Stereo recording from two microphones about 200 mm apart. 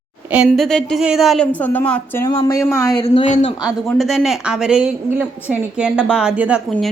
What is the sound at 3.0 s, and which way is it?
Speech, 35° left (ahead or behind).